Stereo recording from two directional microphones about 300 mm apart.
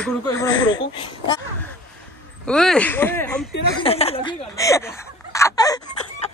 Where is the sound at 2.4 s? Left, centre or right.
Centre.